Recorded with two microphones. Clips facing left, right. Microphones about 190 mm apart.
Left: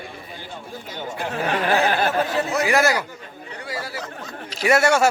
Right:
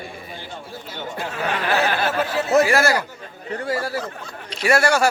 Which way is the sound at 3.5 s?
45° right (ahead or behind).